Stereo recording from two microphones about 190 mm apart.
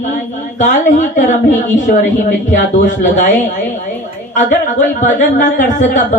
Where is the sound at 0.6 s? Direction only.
40° left (ahead or behind).